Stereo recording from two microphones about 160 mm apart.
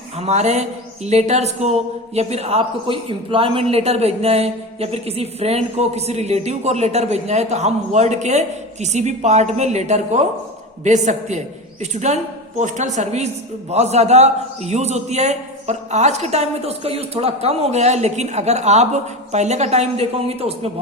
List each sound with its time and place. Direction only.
0.2 s a man's voice: 45° right (ahead or behind)